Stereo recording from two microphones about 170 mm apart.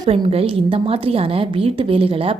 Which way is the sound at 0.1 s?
35° right (ahead or behind).